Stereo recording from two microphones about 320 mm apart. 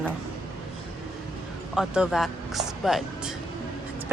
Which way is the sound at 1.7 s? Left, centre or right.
Centre.